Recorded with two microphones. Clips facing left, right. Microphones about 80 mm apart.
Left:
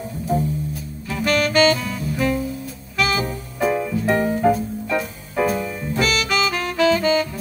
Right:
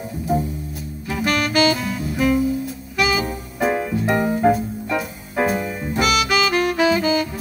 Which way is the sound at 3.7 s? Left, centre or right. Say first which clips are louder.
Left 1 dB; right.